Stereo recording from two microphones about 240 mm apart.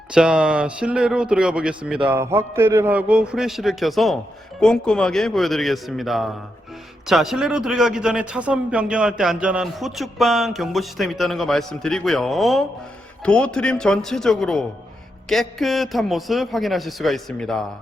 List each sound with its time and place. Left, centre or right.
0.1 s a man's voice: centre